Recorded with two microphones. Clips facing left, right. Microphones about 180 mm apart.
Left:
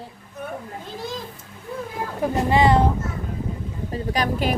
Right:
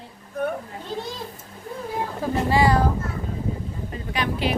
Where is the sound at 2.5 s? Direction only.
20° left (ahead or behind).